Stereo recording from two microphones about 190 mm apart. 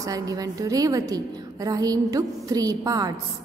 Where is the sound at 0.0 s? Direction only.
20° right (ahead or behind).